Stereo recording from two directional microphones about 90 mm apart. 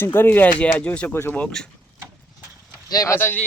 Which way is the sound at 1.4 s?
10° left (ahead or behind).